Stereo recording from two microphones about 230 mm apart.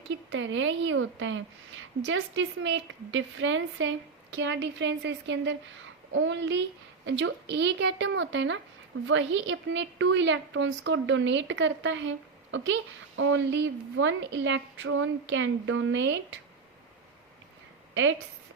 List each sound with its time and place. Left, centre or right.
0.3 s a woman's voice: right